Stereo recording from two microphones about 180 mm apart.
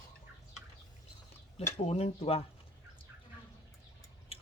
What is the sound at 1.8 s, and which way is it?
Speech, 35° left (ahead or behind).